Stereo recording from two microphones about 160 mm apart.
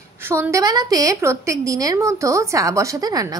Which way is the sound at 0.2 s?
15° right (ahead or behind).